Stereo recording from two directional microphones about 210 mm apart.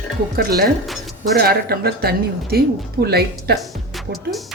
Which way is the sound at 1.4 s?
45° right (ahead or behind).